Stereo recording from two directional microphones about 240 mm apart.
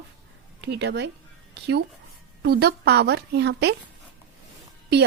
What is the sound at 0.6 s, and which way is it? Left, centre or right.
Speech, right.